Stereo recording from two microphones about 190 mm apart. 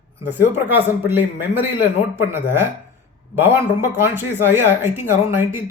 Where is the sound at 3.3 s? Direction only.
10° right (ahead or behind).